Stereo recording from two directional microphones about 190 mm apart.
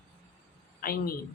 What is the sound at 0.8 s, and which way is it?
Speech, 50° left (ahead or behind).